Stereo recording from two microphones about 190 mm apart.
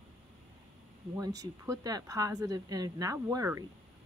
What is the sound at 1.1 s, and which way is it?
A woman's voice, 20° right (ahead or behind).